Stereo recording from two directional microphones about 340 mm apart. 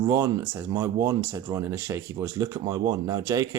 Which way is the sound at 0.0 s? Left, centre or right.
Centre.